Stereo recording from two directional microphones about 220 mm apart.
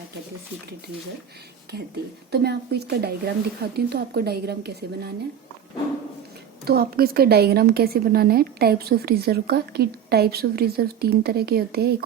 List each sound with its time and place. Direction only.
2.3 s a woman's voice: 50° right (ahead or behind)
6.7 s a woman's voice: 45° right (ahead or behind)